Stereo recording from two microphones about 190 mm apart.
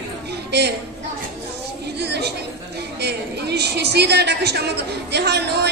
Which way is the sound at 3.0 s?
60° right (ahead or behind).